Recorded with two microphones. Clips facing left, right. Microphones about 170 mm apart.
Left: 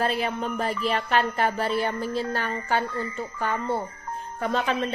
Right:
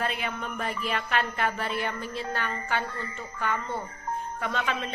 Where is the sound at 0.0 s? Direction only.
35° left (ahead or behind).